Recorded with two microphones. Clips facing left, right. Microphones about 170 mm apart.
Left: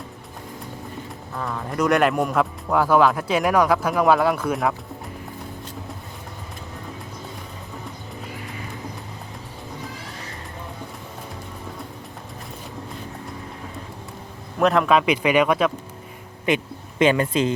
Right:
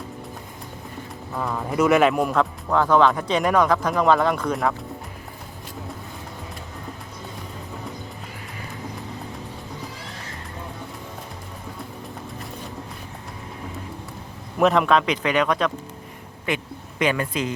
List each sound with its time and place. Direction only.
1.4 s speech: 5° right (ahead or behind)
14.6 s speech: centre (ahead or behind)
16.5 s speech: 20° left (ahead or behind)